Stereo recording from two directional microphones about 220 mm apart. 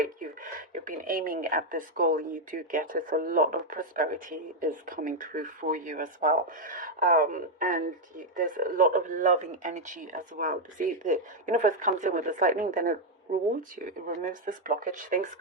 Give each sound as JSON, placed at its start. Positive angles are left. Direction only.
{"t": 0.7, "sound": "a woman's voice", "side_deg": -35}